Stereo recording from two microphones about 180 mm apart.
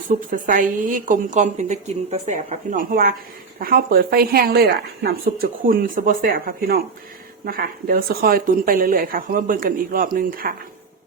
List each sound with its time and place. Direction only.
0.1 s a woman's voice: 50° right (ahead or behind)